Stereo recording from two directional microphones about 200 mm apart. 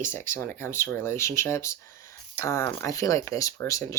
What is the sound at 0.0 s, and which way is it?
Speech, 10° left (ahead or behind).